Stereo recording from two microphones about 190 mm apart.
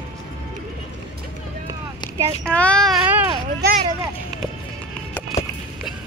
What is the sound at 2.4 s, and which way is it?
Speech, 5° left (ahead or behind).